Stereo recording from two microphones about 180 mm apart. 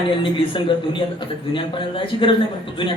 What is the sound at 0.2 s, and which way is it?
A man's voice, 30° left (ahead or behind).